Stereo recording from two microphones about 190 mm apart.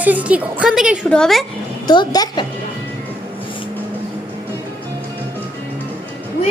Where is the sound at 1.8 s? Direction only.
20° left (ahead or behind).